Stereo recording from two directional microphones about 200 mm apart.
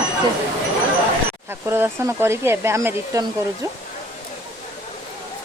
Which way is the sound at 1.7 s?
10° right (ahead or behind).